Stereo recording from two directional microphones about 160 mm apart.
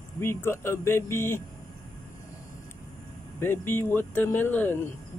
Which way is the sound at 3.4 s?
15° left (ahead or behind).